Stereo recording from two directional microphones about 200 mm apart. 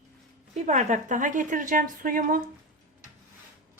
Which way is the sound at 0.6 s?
35° right (ahead or behind).